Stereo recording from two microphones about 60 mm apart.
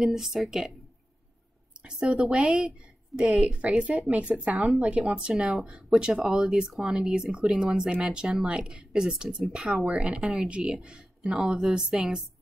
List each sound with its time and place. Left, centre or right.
0.0 s a woman's voice: centre
1.9 s a woman's voice: centre
3.1 s a woman's voice: centre
3.4 s a woman's voice: right
5.3 s a woman's voice: centre